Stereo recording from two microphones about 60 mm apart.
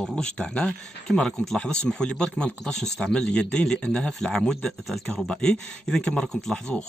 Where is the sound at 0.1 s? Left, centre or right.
Centre.